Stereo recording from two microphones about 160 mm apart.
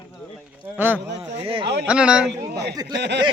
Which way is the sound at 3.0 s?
90° right.